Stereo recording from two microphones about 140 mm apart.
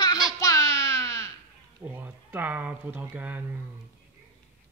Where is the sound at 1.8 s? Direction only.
15° right (ahead or behind).